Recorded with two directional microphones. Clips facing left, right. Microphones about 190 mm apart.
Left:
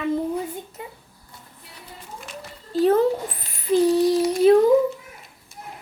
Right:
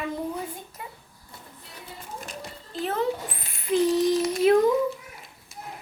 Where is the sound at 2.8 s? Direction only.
40° left (ahead or behind).